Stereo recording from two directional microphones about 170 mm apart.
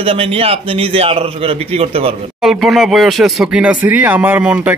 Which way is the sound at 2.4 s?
Centre (ahead or behind).